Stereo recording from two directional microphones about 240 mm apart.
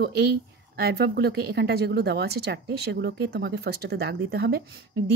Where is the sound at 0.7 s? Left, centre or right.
Right.